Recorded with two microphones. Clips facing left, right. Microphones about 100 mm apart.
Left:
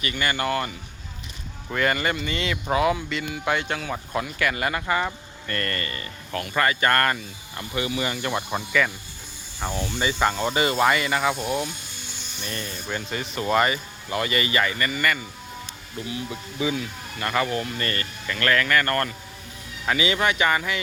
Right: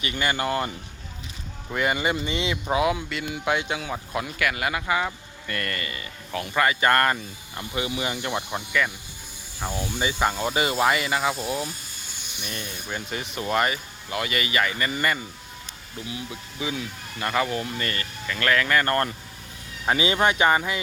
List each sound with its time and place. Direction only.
0.0 s speech: 15° right (ahead or behind)
1.7 s speech: 10° right (ahead or behind)
8.5 s speech: centre (ahead or behind)
9.7 s speech: 15° right (ahead or behind)
12.4 s speech: 10° right (ahead or behind)
14.8 s speech: 20° right (ahead or behind)
16.3 s speech: 5° right (ahead or behind); by 20.8 s 25° right (ahead or behind)